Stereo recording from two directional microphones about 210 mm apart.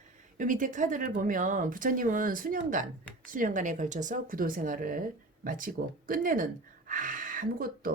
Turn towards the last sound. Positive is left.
turn(degrees=-45)  # may be behind; listen again after turning